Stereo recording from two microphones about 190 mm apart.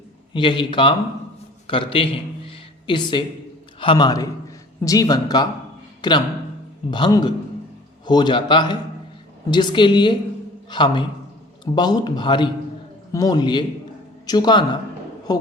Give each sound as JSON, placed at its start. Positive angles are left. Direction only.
{"t": 0.3, "sound": "a man's voice", "side_deg": 25}